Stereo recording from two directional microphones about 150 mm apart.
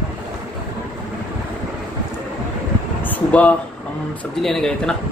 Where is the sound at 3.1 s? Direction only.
10° left (ahead or behind).